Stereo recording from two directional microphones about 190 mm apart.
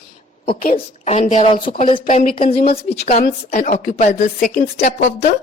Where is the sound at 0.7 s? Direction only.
30° left (ahead or behind).